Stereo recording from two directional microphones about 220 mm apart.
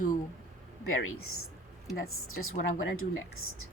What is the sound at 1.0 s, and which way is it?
A woman's voice, 75° left (ahead or behind).